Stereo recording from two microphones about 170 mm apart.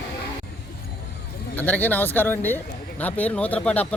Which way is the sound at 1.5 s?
10° left (ahead or behind).